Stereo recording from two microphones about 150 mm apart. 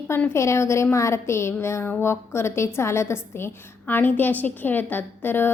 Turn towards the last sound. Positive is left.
turn(degrees=15)  # may be behind; listen again after turning